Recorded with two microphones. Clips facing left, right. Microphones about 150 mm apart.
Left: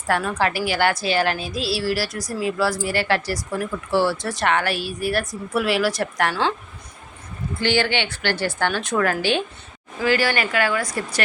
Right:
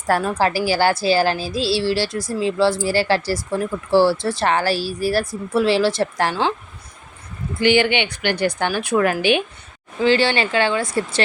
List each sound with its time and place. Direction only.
0.1 s a woman's voice: 35° right (ahead or behind)
7.6 s a woman's voice: 15° right (ahead or behind)
10.0 s speech: 25° right (ahead or behind)